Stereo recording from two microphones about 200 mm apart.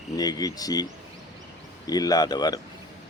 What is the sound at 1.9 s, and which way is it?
Speech, 20° left (ahead or behind).